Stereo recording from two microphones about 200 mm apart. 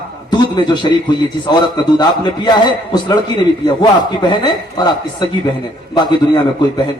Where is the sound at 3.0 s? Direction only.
20° left (ahead or behind).